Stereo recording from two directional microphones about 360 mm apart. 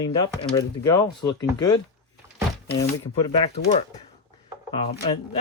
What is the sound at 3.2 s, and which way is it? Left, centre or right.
Speech, centre.